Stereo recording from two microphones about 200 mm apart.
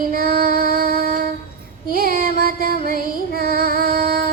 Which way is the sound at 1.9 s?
45° right (ahead or behind).